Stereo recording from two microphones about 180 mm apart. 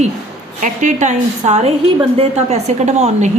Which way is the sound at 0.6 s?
45° right (ahead or behind).